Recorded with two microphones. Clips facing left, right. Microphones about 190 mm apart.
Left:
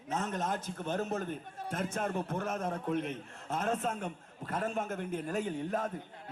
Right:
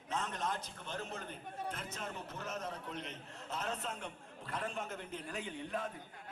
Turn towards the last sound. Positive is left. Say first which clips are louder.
# left 7 dB
turn(degrees=45)  # may be behind; listen again after turning